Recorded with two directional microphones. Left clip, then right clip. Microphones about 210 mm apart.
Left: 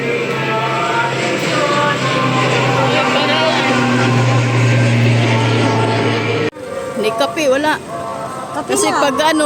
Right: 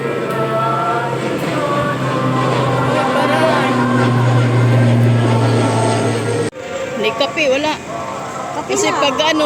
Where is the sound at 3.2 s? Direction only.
10° right (ahead or behind).